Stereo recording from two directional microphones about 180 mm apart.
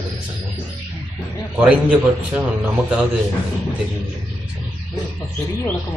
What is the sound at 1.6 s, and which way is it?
A man's voice, 5° right (ahead or behind).